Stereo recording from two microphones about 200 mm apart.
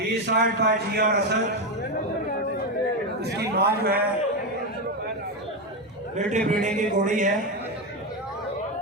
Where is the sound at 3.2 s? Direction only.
55° right (ahead or behind).